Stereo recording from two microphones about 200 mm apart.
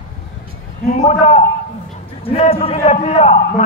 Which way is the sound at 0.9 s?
35° left (ahead or behind).